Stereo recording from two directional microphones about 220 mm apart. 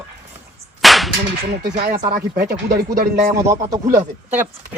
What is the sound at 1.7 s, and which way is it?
Speech, 40° right (ahead or behind).